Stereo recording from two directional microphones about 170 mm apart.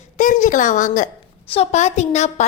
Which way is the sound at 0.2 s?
50° left (ahead or behind).